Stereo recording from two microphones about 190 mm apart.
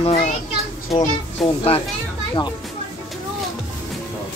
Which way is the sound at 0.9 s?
30° left (ahead or behind).